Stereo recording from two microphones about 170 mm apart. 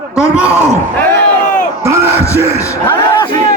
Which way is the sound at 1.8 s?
15° right (ahead or behind).